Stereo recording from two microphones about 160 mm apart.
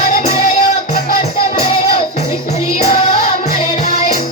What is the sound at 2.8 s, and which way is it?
Music, 40° left (ahead or behind).